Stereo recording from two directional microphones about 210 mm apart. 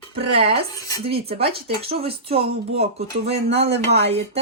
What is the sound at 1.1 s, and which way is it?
Speech, 25° right (ahead or behind).